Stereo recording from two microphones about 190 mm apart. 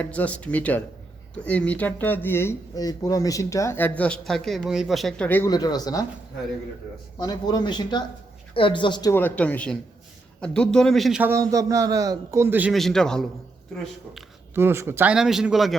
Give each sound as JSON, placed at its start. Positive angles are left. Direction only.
{"t": 0.0, "sound": "speech", "side_deg": 5}
{"t": 7.2, "sound": "a man's voice", "side_deg": 20}
{"t": 12.7, "sound": "a man's voice", "side_deg": 0}
{"t": 14.5, "sound": "a man's voice", "side_deg": -15}